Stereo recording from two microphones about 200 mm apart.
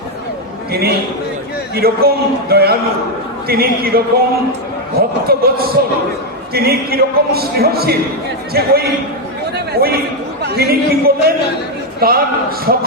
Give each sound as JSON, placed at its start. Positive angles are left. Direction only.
{"t": 0.7, "sound": "speech", "side_deg": -50}
{"t": 9.6, "sound": "a sound", "side_deg": -50}
{"t": 10.4, "sound": "speech", "side_deg": -50}